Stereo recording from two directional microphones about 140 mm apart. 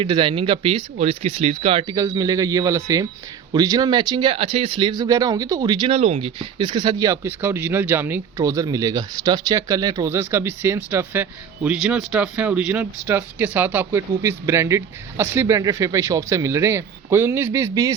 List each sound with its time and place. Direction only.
0.0 s speech: 35° right (ahead or behind)
2.0 s speech: 25° right (ahead or behind)
5.9 s speech: 45° right (ahead or behind)
7.1 s speech: 15° right (ahead or behind)